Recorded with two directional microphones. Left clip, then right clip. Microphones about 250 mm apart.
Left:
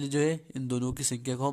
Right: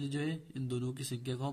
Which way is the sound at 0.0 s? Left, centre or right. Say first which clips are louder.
Left 10 dB; left.